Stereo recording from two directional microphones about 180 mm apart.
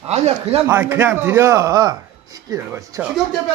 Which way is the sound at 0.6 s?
15° right (ahead or behind).